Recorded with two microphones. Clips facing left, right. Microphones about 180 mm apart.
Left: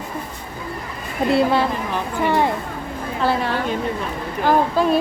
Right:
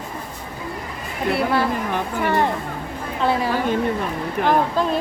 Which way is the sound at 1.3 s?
25° left (ahead or behind).